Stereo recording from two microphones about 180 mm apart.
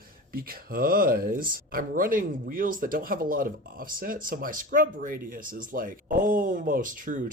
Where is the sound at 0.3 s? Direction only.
55° right (ahead or behind).